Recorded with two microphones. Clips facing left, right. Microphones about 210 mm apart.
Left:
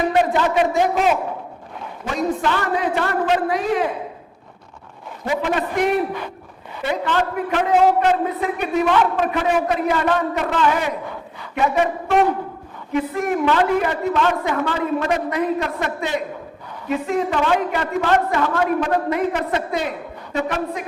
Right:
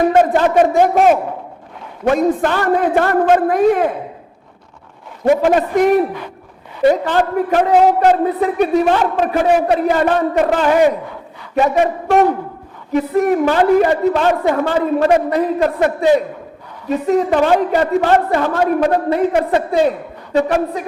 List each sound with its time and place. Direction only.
0.1 s a man's voice: 45° right (ahead or behind)
5.2 s a man's voice: 50° right (ahead or behind)